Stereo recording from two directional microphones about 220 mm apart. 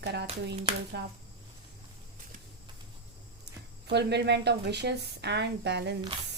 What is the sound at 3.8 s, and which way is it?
A woman's voice, 50° right (ahead or behind).